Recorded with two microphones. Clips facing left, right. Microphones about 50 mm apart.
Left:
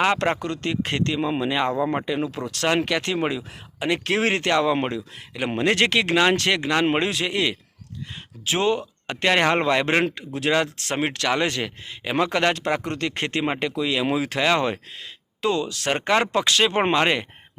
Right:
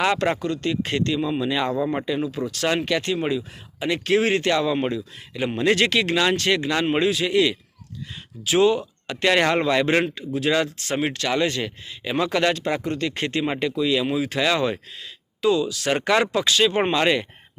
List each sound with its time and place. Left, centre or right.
0.2 s speech: left
1.8 s speech: left
2.0 s speech: left
6.3 s speech: left
9.6 s speech: left
14.3 s speech: left